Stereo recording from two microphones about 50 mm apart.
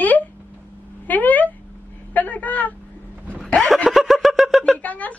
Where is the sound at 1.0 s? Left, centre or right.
Left.